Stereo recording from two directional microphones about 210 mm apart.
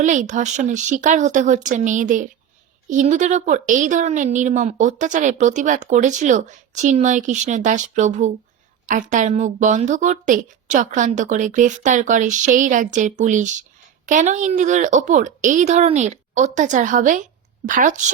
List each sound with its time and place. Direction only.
0.0 s speech: 35° right (ahead or behind)